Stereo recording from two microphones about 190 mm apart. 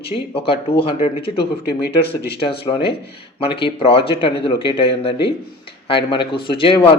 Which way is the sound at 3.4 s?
30° left (ahead or behind).